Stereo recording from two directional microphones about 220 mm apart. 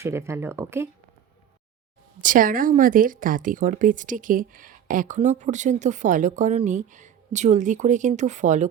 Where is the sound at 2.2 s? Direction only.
35° right (ahead or behind).